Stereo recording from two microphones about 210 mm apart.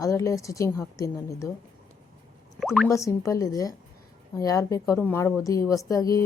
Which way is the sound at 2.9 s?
15° left (ahead or behind).